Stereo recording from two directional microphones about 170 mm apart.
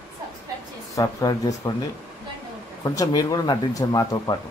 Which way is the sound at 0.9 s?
20° left (ahead or behind).